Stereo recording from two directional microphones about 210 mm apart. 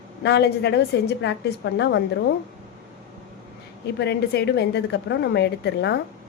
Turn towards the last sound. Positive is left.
turn(degrees=50)  # may be behind; listen again after turning